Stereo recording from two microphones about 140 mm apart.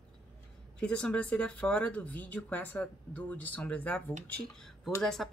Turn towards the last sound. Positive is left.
turn(degrees=0)  # may be behind; listen again after turning